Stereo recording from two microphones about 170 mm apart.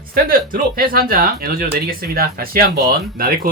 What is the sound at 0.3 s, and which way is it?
Speech, 55° right (ahead or behind).